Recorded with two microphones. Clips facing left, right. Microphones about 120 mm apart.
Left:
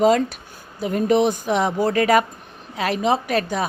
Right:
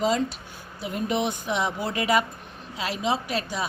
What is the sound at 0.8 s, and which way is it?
A woman's voice, 45° left (ahead or behind).